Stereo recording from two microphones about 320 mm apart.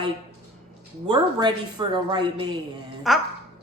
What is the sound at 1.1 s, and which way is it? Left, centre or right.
A woman's voice, centre.